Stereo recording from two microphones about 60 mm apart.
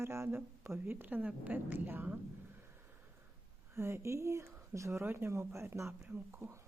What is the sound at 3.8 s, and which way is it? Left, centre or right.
Speech, right.